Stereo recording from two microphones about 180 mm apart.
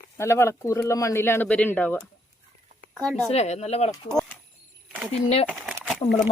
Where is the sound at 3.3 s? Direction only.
35° left (ahead or behind).